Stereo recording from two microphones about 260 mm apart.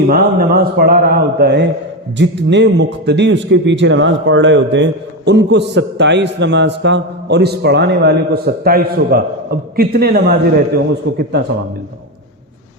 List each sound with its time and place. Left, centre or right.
0.1 s a man's voice: right